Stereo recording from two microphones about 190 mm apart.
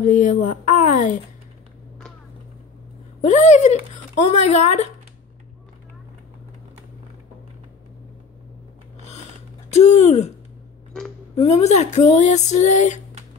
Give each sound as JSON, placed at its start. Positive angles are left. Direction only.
{"t": 0.0, "sound": "a woman's voice", "side_deg": 40}
{"t": 3.2, "sound": "speech", "side_deg": 40}
{"t": 9.7, "sound": "speech", "side_deg": 35}
{"t": 11.3, "sound": "speech", "side_deg": 35}